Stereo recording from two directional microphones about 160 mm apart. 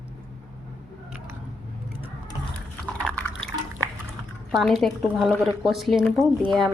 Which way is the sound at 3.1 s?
5° left (ahead or behind).